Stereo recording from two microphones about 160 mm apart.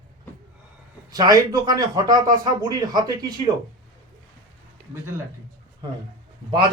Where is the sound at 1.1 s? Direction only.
25° right (ahead or behind).